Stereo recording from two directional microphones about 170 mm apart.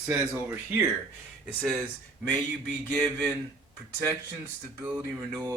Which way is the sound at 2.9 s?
Centre (ahead or behind).